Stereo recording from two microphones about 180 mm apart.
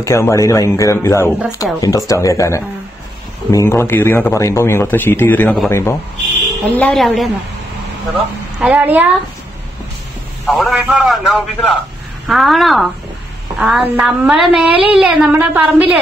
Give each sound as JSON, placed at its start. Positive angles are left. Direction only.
{"t": 0.0, "sound": "speech", "side_deg": 15}
{"t": 6.8, "sound": "a man's voice", "side_deg": 0}
{"t": 8.5, "sound": "speech", "side_deg": -10}
{"t": 10.4, "sound": "a man's voice", "side_deg": 0}